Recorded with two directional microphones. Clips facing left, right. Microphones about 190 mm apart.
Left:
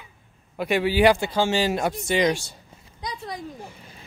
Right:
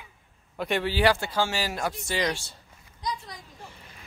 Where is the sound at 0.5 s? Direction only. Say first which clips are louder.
Left 5 dB; 10° left (ahead or behind).